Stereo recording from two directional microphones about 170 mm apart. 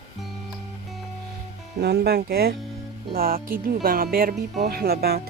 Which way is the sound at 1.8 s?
70° right (ahead or behind).